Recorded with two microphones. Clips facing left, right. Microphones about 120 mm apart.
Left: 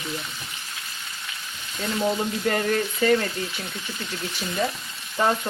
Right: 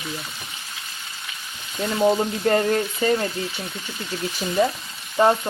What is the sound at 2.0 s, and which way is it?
Frying, 30° right (ahead or behind).